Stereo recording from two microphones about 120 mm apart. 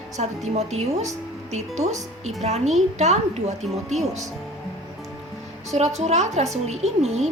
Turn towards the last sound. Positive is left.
turn(degrees=-65)  # may be behind; listen again after turning